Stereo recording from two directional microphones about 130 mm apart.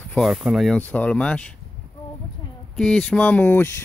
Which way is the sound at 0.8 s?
10° left (ahead or behind).